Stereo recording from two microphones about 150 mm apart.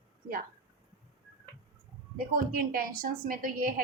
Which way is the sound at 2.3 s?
85° right.